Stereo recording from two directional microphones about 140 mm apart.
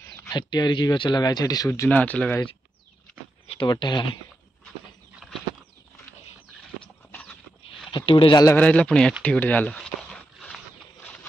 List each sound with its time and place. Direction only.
0.0 s speech: 25° left (ahead or behind); by 2.3 s 10° left (ahead or behind)
3.4 s a sound: 40° left (ahead or behind)
3.7 s speech: 30° left (ahead or behind)
5.2 s bird flight: 5° right (ahead or behind)
7.9 s speech: 40° left (ahead or behind)
8.5 s speech: 10° left (ahead or behind)
9.2 s a sound: 10° left (ahead or behind)